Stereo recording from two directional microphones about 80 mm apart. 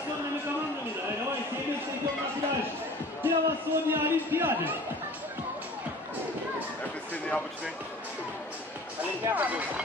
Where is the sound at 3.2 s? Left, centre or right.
Right.